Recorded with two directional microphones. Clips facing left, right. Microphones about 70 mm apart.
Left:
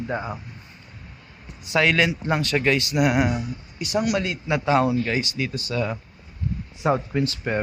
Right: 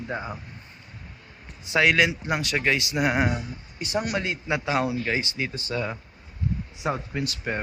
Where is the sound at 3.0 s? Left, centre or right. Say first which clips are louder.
Left 3 dB; right.